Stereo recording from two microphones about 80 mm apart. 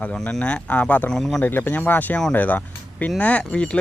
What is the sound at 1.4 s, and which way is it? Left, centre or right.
Speech, left.